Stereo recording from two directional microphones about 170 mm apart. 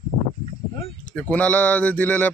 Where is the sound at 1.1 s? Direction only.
10° left (ahead or behind).